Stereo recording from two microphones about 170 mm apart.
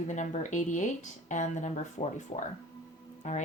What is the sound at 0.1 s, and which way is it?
Speech, 45° left (ahead or behind).